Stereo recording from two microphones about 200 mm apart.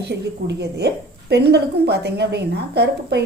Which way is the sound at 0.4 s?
60° right (ahead or behind).